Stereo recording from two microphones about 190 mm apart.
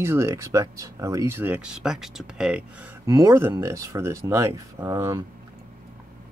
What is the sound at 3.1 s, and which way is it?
Speech, 15° right (ahead or behind).